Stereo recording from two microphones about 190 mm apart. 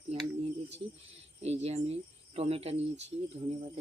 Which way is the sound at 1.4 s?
35° right (ahead or behind).